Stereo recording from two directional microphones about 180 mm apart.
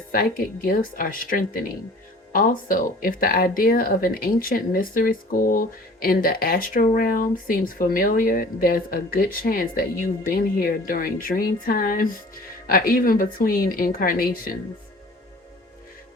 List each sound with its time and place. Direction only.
0.1 s speech: 50° left (ahead or behind)